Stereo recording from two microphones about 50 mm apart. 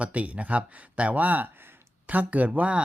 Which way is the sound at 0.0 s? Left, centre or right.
Right.